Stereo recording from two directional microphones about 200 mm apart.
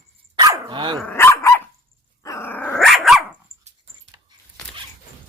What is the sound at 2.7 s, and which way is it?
Dog, centre (ahead or behind).